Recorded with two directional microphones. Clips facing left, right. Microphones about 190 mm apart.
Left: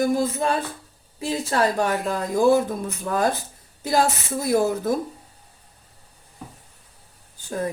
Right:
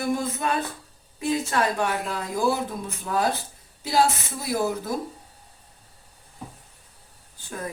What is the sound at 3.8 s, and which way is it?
Speech, 45° left (ahead or behind).